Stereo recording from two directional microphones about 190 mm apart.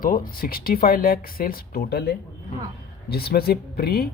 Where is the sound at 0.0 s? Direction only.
50° left (ahead or behind).